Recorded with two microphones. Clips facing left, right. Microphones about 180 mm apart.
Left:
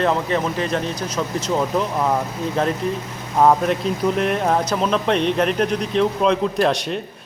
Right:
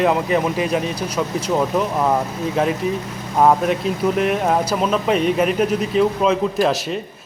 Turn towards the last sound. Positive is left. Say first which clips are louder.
# right 1 dB
turn(degrees=0)  # may be behind; listen again after turning